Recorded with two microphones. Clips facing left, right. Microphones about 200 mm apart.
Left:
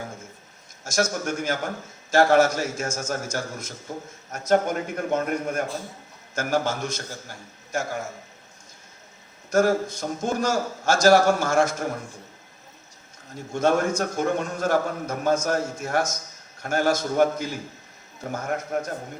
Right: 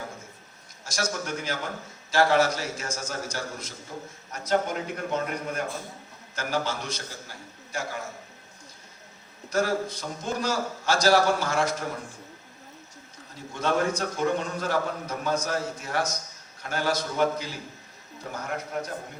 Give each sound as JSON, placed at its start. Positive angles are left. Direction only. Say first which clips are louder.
{"t": 0.9, "sound": "a man's voice", "louder": "left 6 dB", "side_deg": 45}
{"t": 9.5, "sound": "a man's voice", "louder": "left 5 dB", "side_deg": 45}
{"t": 13.5, "sound": "a man's voice", "louder": "left 4 dB", "side_deg": 45}